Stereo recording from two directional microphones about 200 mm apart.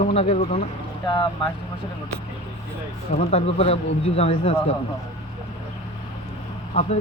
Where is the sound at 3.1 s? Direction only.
30° left (ahead or behind).